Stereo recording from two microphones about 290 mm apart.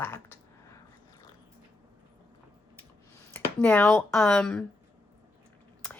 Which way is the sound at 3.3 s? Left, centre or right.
Centre.